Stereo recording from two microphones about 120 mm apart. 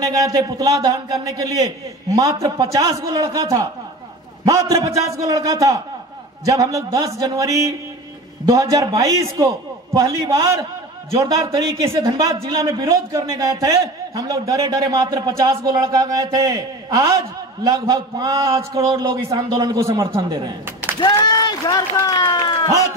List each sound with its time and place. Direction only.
0.0 s a man's voice: 30° right (ahead or behind)
21.0 s speech: 35° left (ahead or behind)